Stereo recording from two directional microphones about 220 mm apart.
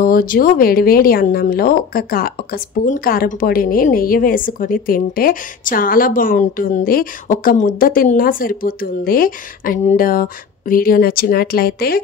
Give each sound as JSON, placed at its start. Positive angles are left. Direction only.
{"t": 0.0, "sound": "a woman's voice", "side_deg": 40}